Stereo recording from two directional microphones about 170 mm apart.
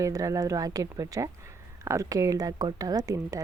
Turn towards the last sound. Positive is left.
turn(degrees=-20)  # may be behind; listen again after turning